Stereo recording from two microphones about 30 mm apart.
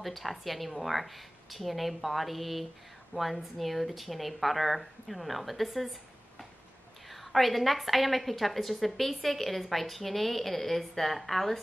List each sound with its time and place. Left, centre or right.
0.0 s a woman's voice: centre
7.1 s a woman's voice: centre